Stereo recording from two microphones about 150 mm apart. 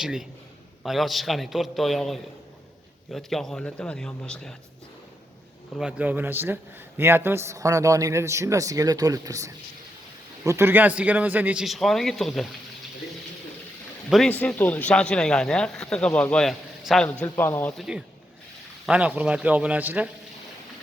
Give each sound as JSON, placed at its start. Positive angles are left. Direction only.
{"t": 0.0, "sound": "speech", "side_deg": -5}
{"t": 5.8, "sound": "a man's voice", "side_deg": -10}
{"t": 14.1, "sound": "speech", "side_deg": 5}
{"t": 17.7, "sound": "a man's voice", "side_deg": -5}